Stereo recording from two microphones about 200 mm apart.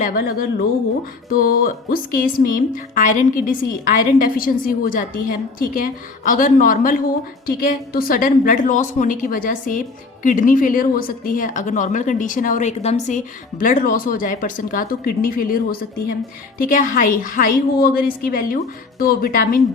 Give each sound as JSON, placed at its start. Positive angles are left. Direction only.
{"t": 0.0, "sound": "speech", "side_deg": 45}